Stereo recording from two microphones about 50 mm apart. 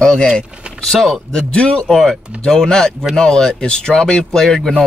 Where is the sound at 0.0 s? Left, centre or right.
Centre.